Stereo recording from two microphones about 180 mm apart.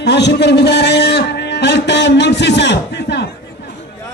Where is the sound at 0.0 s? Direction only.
70° left (ahead or behind).